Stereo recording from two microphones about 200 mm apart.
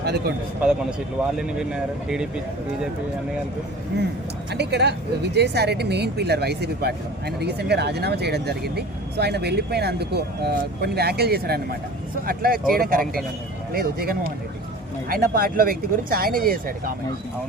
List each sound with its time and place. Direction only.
0.0 s speech: 55° right (ahead or behind)
0.6 s speech: 5° right (ahead or behind)
4.5 s speech: 55° right (ahead or behind)